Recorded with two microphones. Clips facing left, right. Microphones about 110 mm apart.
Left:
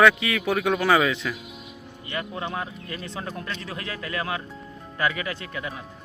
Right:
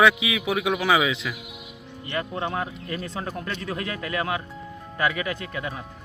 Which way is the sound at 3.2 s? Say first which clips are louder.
Right 2 dB; 15° right (ahead or behind).